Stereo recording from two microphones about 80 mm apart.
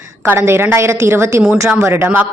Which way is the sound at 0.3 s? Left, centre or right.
Right.